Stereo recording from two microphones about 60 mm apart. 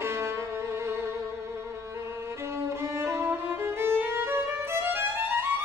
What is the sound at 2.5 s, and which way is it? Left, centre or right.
Violin, right.